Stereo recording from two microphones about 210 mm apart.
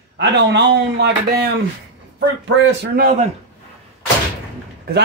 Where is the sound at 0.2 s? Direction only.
55° right (ahead or behind).